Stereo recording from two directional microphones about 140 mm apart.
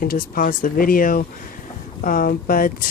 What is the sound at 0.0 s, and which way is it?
Speech, 90° left.